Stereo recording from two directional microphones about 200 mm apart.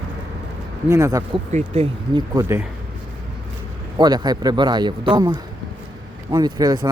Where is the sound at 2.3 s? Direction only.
15° right (ahead or behind).